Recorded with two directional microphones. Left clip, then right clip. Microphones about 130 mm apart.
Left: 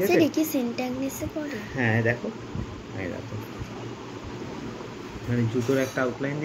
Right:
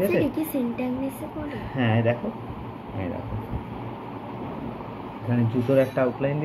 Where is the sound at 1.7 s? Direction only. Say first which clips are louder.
Right 1 dB; 70° right (ahead or behind).